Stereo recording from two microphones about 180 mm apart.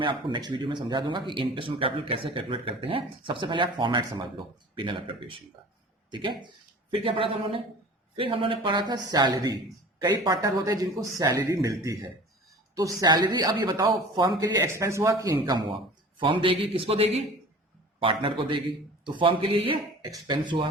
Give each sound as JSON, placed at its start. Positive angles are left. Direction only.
{"t": 0.0, "sound": "a woman's voice", "side_deg": -25}
{"t": 13.0, "sound": "speech", "side_deg": -20}